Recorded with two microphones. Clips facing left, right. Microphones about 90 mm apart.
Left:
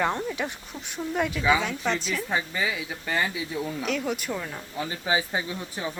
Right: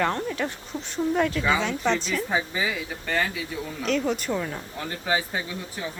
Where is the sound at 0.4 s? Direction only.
15° left (ahead or behind); by 4.6 s 5° right (ahead or behind).